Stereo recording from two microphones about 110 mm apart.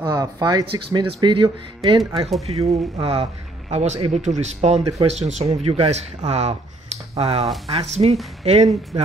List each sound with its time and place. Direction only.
0.0 s speech: 35° right (ahead or behind)
0.7 s speech: 55° right (ahead or behind)
2.4 s speech: 65° right (ahead or behind)
3.7 s speech: 85° right
4.9 s speech: 75° right (ahead or behind)
7.6 s speech: 80° right